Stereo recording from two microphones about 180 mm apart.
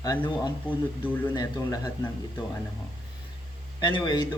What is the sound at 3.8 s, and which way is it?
Speech, 25° left (ahead or behind).